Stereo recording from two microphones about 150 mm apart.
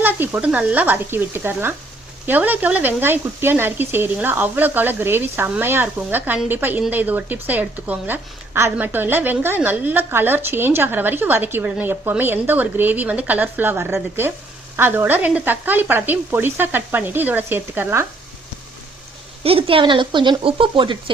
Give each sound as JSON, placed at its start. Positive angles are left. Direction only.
{"t": 0.0, "sound": "a woman's voice", "side_deg": -10}
{"t": 19.4, "sound": "speech", "side_deg": -40}